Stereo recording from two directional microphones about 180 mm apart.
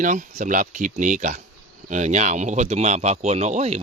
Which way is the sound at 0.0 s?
45° right (ahead or behind).